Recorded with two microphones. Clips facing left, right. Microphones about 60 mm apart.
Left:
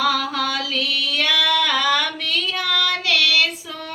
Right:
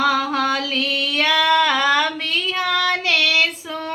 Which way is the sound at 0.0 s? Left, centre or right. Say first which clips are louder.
Right 2 dB; right.